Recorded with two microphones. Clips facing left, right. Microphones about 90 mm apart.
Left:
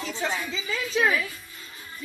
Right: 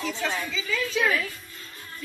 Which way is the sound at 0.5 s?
35° left (ahead or behind).